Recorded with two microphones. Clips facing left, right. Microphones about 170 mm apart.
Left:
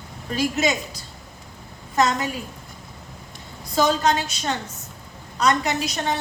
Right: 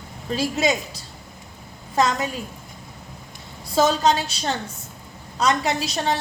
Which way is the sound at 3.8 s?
30° right (ahead or behind).